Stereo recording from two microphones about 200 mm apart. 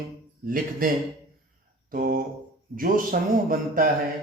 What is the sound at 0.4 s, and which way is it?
Mantra, 45° right (ahead or behind).